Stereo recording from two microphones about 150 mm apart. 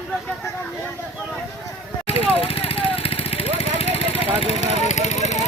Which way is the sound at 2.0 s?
40° left (ahead or behind).